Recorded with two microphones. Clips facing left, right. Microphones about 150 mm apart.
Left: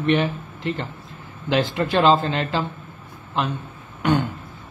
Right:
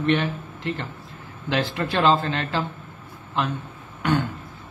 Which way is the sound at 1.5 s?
20° left (ahead or behind).